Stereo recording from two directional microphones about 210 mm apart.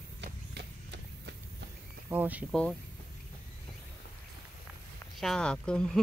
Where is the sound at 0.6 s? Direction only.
50° right (ahead or behind).